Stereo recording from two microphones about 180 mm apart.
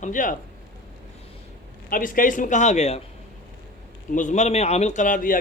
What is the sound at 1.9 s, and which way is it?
Speech, 50° left (ahead or behind).